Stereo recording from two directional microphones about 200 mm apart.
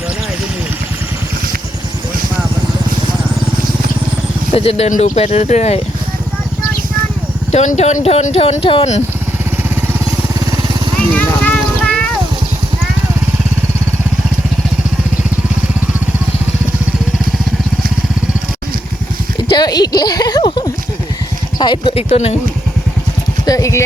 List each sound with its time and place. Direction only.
4.5 s speech: 30° left (ahead or behind)
7.5 s speech: 35° left (ahead or behind)
11.1 s a sound: 5° left (ahead or behind)
19.5 s a sound: 20° left (ahead or behind)
21.6 s speech: 25° left (ahead or behind)
23.5 s speech: 15° left (ahead or behind)